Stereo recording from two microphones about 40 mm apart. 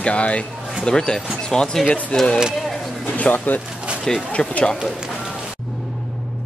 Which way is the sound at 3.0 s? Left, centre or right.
Left.